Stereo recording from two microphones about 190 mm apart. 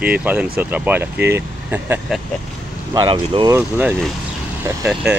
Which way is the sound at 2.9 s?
25° right (ahead or behind).